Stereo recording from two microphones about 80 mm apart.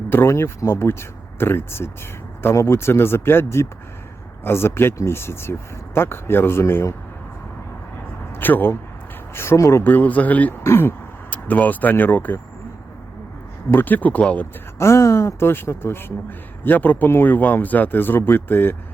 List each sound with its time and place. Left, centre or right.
0.1 s speech: left
8.4 s speech: left
9.8 s speech: left
10.6 s speech: left
13.7 s speech: left
14.8 s speech: left